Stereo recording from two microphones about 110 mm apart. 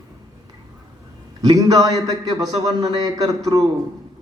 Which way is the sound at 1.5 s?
35° right (ahead or behind).